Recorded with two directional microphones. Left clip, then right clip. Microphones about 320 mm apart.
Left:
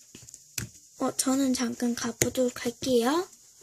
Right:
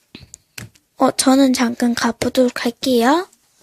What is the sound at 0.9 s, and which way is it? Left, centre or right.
Speech, right.